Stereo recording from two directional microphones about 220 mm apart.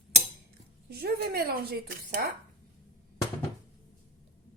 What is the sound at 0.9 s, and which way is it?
Speech, 45° right (ahead or behind).